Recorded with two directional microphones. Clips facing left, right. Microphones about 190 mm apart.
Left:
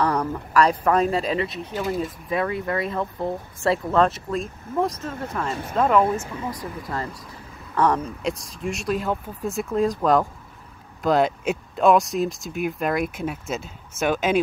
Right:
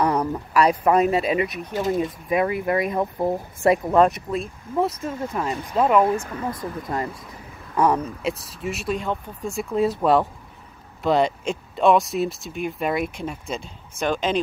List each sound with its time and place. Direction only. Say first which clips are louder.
0.0 s speech: right 1 dB; 10° right (ahead or behind)
7.7 s speech: right 1 dB; 10° right (ahead or behind); by 14.4 s 10° left (ahead or behind)